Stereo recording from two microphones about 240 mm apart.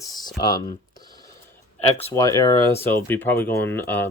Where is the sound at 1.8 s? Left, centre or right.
Left.